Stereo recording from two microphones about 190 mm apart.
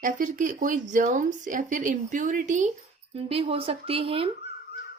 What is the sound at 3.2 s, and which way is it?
Speech, 30° right (ahead or behind).